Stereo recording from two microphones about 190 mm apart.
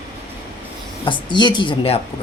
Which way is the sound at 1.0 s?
25° left (ahead or behind).